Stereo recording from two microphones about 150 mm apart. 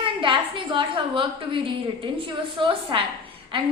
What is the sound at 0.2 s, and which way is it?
A woman's voice, 35° right (ahead or behind).